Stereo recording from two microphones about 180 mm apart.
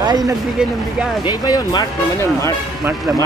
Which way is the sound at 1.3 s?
25° left (ahead or behind).